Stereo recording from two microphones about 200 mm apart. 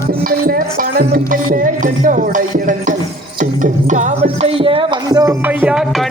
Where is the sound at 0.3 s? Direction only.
50° right (ahead or behind); by 5.3 s 20° right (ahead or behind).